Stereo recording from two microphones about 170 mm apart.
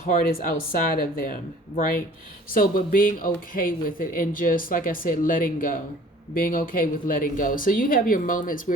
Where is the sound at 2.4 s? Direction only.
55° left (ahead or behind).